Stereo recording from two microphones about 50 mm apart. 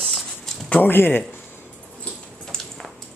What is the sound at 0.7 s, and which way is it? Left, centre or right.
Speech, left.